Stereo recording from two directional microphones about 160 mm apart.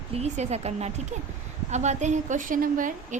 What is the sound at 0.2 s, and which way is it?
A woman's voice, 40° right (ahead or behind).